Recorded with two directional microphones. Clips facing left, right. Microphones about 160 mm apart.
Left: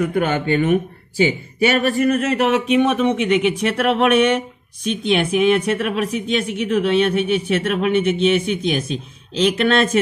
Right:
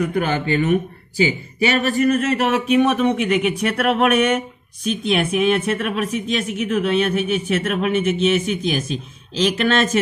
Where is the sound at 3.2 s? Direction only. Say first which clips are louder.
Left 2 dB; 30° left (ahead or behind).